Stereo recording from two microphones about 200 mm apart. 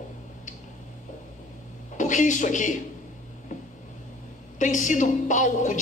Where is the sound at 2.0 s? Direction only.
40° left (ahead or behind).